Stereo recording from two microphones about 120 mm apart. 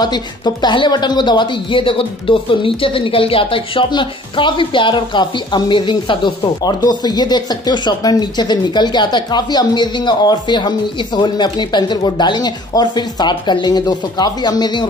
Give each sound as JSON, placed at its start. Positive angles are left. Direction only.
{"t": 0.0, "sound": "speech", "side_deg": 35}